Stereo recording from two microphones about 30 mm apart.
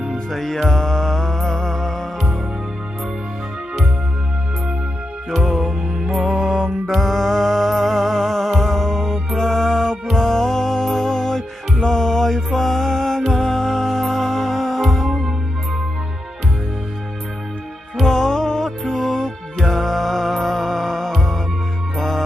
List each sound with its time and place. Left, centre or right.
0.3 s music: centre
5.5 s music: centre
6.8 s music: centre
18.0 s music: centre